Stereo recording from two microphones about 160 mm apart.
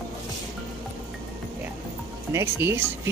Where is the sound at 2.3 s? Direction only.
15° right (ahead or behind).